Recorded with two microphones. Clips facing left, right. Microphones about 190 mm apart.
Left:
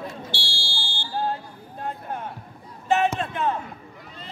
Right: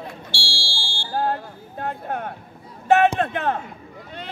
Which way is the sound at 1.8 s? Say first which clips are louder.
Right 4 dB; 65° right (ahead or behind).